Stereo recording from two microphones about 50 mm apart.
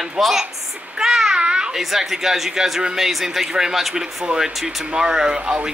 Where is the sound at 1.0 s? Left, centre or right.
Centre.